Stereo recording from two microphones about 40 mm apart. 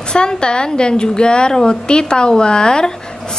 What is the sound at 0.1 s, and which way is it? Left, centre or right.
A woman's voice, left.